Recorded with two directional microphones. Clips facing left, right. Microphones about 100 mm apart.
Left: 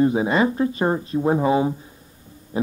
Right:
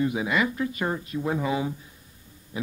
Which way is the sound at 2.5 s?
35° left (ahead or behind).